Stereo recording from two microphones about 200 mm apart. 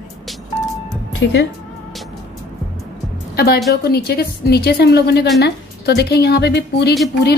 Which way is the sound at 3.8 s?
55° left (ahead or behind).